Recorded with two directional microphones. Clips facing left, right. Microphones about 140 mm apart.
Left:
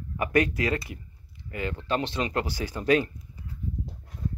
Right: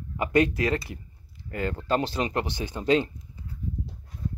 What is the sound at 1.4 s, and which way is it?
Speech, 40° right (ahead or behind).